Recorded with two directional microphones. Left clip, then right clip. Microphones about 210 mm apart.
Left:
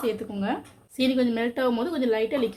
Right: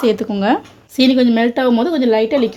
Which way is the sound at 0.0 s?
40° right (ahead or behind).